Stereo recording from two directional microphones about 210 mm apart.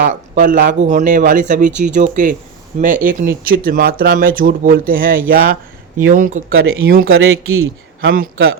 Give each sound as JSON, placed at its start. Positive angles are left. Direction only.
{"t": 0.0, "sound": "speech", "side_deg": -40}
{"t": 7.1, "sound": "a man's voice", "side_deg": -75}
{"t": 8.1, "sound": "speech", "side_deg": -45}